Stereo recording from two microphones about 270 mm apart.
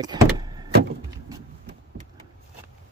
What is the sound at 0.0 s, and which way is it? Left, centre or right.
Vehicle, centre.